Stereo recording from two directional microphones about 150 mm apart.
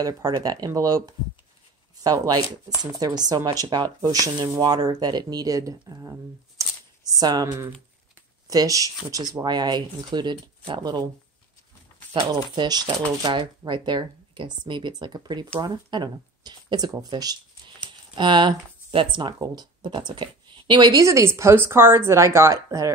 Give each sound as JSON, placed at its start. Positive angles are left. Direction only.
{"t": 0.0, "sound": "speech", "side_deg": -25}
{"t": 6.6, "sound": "a sound", "side_deg": -20}
{"t": 7.2, "sound": "speech", "side_deg": -25}
{"t": 12.2, "sound": "speech", "side_deg": -25}